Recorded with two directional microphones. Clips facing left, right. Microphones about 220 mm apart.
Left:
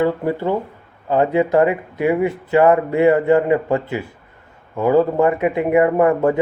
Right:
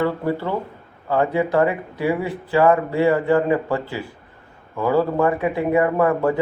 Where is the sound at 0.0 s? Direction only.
15° left (ahead or behind).